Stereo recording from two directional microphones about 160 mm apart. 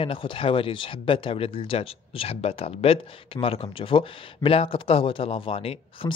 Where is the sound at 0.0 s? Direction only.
35° left (ahead or behind).